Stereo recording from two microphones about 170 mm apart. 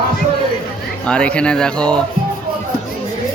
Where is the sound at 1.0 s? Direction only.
5° left (ahead or behind).